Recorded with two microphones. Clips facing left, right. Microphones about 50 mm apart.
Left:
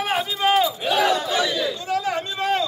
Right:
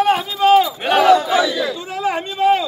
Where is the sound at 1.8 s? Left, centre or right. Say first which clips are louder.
Right 2 dB; right.